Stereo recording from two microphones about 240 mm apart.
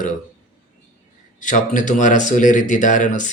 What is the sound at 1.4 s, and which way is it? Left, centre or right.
Speech, left.